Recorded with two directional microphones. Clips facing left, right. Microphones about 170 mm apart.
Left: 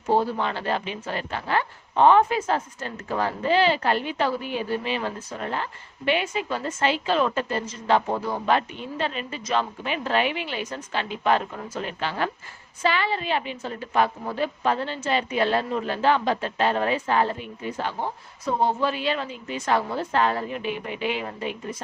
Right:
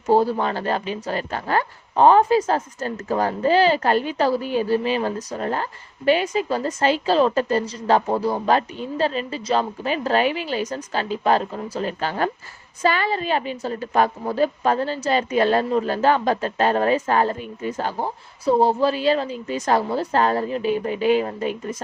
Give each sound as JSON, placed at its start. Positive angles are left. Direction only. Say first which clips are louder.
{"t": 0.1, "sound": "a woman's voice", "louder": "right 5 dB", "side_deg": -40}